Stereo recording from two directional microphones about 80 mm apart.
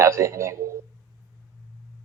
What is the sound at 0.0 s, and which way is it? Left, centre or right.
Speech, right.